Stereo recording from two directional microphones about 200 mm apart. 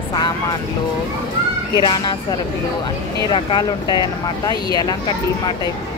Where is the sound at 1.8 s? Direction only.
20° left (ahead or behind).